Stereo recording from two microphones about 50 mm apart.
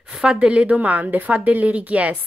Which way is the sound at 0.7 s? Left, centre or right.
Right.